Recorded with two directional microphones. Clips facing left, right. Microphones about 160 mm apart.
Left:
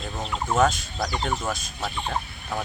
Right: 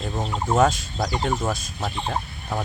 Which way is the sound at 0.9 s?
25° right (ahead or behind).